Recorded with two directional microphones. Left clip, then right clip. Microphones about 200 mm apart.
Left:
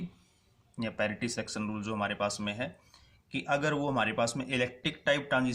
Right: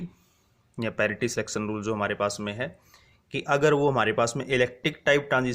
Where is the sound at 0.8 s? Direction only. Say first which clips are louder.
Right 7 dB; 50° right (ahead or behind).